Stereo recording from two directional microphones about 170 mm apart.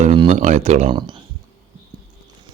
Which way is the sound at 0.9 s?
25° right (ahead or behind).